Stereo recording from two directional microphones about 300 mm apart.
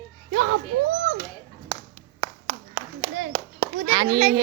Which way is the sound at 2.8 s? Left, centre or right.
Right.